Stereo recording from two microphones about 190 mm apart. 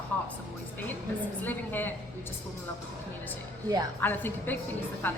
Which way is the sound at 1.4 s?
10° left (ahead or behind).